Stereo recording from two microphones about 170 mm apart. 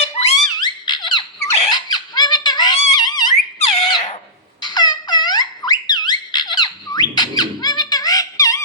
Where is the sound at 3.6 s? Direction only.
25° left (ahead or behind).